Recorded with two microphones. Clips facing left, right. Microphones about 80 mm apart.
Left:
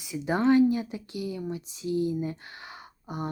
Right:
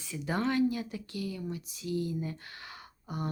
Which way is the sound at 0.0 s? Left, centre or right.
Centre.